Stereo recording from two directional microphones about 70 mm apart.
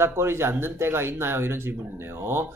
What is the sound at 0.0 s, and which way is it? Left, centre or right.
Speech, right.